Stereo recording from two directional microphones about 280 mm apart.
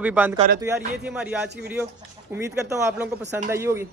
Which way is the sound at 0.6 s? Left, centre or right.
Centre.